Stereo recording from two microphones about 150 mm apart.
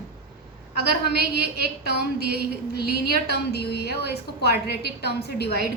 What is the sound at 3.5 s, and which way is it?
A woman's voice, 90° left.